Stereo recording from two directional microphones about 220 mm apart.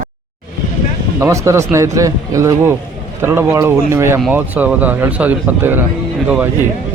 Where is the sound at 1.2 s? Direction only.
15° right (ahead or behind).